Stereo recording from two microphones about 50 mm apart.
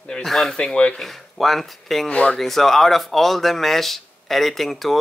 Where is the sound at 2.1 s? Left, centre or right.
Left.